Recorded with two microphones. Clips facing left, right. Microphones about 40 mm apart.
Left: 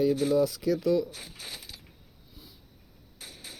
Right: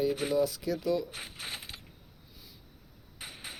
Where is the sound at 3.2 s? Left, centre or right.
Right.